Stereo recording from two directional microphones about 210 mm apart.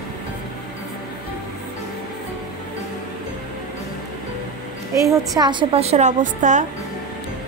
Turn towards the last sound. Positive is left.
turn(degrees=-35)  # may be behind; listen again after turning